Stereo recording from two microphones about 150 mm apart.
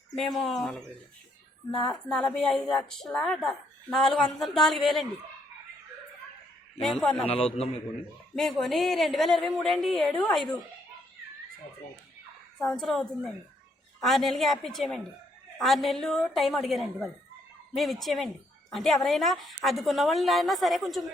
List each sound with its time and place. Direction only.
0.2 s a woman's voice: centre (ahead or behind)
2.0 s a woman's voice: 5° left (ahead or behind)
6.8 s a woman's voice: 5° left (ahead or behind)
7.2 s a man's voice: 40° left (ahead or behind)
8.4 s a woman's voice: centre (ahead or behind)
12.5 s a woman's voice: 5° left (ahead or behind)